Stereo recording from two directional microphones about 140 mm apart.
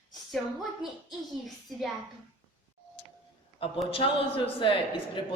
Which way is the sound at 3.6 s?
40° left (ahead or behind).